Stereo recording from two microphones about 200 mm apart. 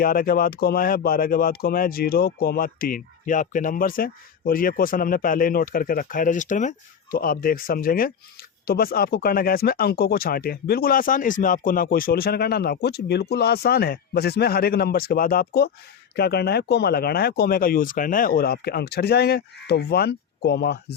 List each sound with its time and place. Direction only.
0.0 s speech: 45° left (ahead or behind)